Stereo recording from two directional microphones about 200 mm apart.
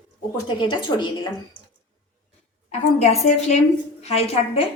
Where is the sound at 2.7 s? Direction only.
35° left (ahead or behind).